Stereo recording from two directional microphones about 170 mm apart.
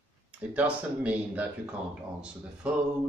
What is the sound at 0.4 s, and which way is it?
Speech, 10° right (ahead or behind).